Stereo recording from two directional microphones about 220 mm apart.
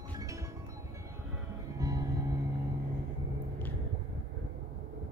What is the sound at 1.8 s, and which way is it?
Music, 15° right (ahead or behind).